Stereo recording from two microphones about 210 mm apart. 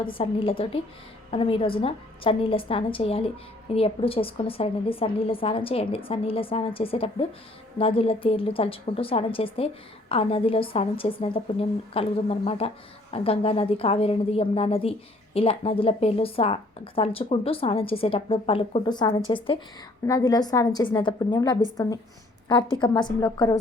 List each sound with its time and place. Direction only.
0.0 s a woman's voice: 25° left (ahead or behind)